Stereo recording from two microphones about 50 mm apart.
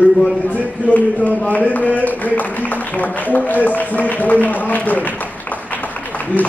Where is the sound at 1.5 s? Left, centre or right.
Left.